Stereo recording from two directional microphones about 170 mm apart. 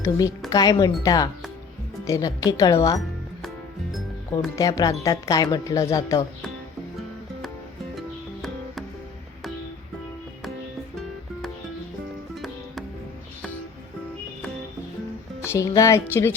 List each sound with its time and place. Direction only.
0.0 s speech: 20° left (ahead or behind)
4.5 s speech: 20° left (ahead or behind)
15.4 s speech: 20° left (ahead or behind)